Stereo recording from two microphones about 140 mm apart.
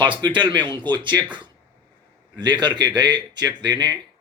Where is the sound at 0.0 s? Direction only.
35° right (ahead or behind).